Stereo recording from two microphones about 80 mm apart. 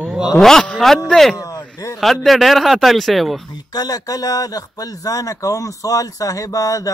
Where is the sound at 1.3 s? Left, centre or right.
Left.